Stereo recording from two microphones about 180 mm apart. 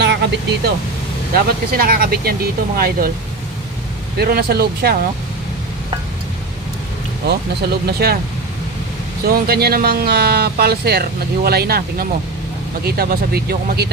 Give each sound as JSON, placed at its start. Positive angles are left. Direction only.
{"t": 0.0, "sound": "vehicle", "side_deg": -70}
{"t": 1.3, "sound": "speech", "side_deg": -55}
{"t": 4.2, "sound": "speech", "side_deg": -55}
{"t": 7.3, "sound": "speech", "side_deg": -60}
{"t": 9.2, "sound": "speech", "side_deg": -60}